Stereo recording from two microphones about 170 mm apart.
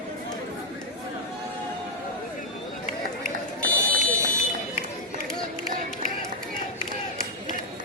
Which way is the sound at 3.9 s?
55° right (ahead or behind).